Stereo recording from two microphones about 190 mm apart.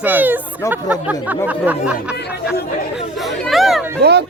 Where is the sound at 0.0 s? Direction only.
10° right (ahead or behind).